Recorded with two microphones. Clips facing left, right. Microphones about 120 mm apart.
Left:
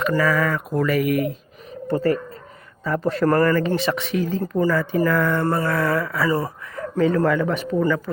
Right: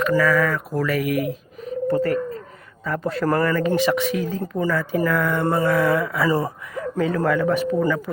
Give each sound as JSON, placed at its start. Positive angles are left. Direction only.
{"t": 0.0, "sound": "a man's voice", "side_deg": 5}
{"t": 3.7, "sound": "speech", "side_deg": -15}
{"t": 6.2, "sound": "speech", "side_deg": -25}
{"t": 6.7, "sound": "speech", "side_deg": -5}